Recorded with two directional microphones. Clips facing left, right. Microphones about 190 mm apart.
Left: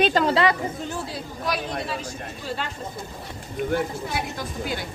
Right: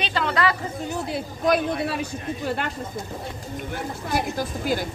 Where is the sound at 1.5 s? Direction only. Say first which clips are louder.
Right 6 dB; 55° right (ahead or behind).